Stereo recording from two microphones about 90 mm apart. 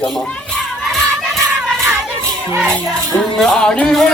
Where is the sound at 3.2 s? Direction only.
5° left (ahead or behind).